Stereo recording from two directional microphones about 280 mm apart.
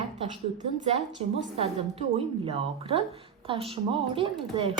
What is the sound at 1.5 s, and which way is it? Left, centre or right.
A woman's voice, right.